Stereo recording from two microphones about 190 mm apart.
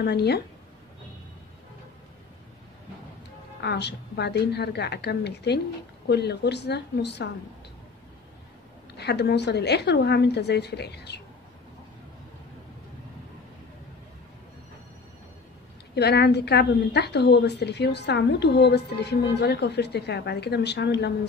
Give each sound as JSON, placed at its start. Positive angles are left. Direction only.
{"t": 0.0, "sound": "a woman's voice", "side_deg": 60}
{"t": 3.6, "sound": "a woman's voice", "side_deg": 60}
{"t": 8.9, "sound": "a woman's voice", "side_deg": 60}
{"t": 15.9, "sound": "a woman's voice", "side_deg": 60}